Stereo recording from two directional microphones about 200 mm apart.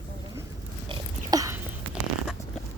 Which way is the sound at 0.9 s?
15° right (ahead or behind).